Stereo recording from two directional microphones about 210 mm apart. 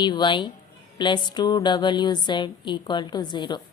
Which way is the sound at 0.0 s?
20° left (ahead or behind).